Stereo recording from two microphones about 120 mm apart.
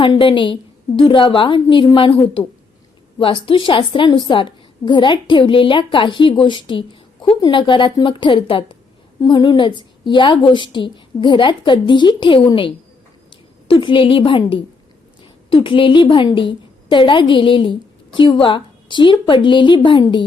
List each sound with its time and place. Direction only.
0.0 s a woman's voice: 45° left (ahead or behind)